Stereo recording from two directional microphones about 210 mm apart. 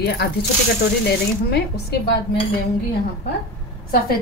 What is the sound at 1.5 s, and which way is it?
Speech, 50° left (ahead or behind).